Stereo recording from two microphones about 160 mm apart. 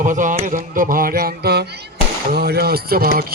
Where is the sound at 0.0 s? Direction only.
55° right (ahead or behind); by 1.6 s 85° right.